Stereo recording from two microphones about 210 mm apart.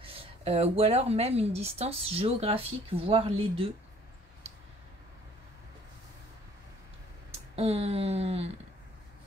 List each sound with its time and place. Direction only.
0.0 s speech: 25° right (ahead or behind)
7.5 s speech: 30° right (ahead or behind)